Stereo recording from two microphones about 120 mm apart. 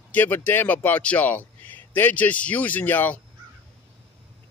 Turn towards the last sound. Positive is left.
turn(degrees=15)  # may be behind; listen again after turning